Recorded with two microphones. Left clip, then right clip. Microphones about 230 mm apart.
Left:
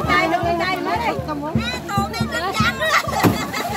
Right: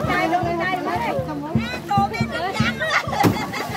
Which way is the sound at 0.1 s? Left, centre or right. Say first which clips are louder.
Left 3 dB; left.